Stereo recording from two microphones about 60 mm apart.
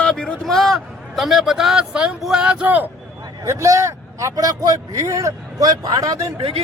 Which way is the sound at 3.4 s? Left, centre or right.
Right.